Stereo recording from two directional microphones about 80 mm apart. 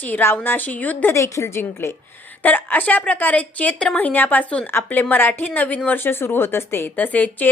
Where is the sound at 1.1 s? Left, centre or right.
Left.